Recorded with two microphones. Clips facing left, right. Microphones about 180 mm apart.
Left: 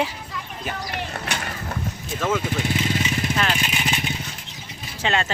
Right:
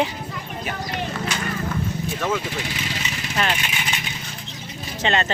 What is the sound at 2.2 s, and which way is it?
Speech, 5° left (ahead or behind).